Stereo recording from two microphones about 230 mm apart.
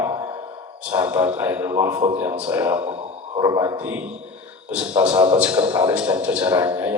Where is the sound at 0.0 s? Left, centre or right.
Centre.